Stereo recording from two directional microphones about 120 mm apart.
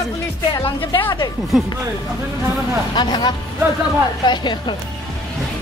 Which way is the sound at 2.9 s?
40° left (ahead or behind).